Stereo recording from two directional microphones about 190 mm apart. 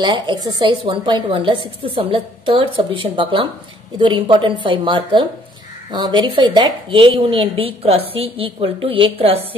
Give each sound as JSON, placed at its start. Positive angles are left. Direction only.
{"t": 0.0, "sound": "a woman's voice", "side_deg": -25}